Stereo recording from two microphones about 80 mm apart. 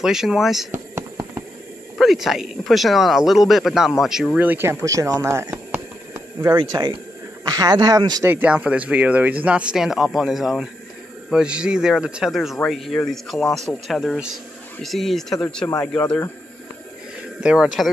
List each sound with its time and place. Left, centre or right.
0.0 s speech: centre
2.0 s speech: centre
4.4 s speech: right
4.8 s speech: right
6.5 s speech: right
7.4 s speech: right
8.2 s speech: right; by 15.3 s centre
15.8 s speech: centre
17.4 s speech: centre